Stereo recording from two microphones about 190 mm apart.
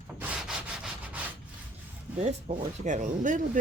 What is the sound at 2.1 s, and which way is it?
Speech, 35° right (ahead or behind).